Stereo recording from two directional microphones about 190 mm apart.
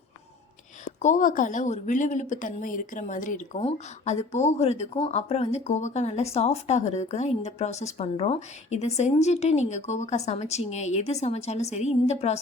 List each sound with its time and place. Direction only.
1.0 s speech: 40° left (ahead or behind)